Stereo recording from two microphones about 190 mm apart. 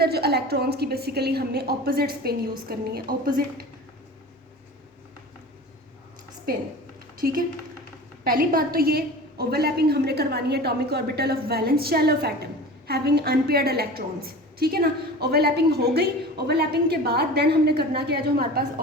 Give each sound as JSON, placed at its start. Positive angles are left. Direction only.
{"t": 0.0, "sound": "a woman's voice", "side_deg": -55}
{"t": 7.2, "sound": "a woman's voice", "side_deg": -50}